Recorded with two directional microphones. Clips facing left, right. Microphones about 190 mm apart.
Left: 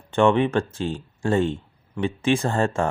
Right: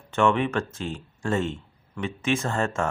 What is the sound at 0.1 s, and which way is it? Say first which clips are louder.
Speech: left 4 dB; 30° left (ahead or behind).